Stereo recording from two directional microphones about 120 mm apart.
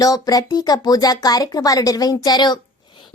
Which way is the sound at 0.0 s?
30° left (ahead or behind).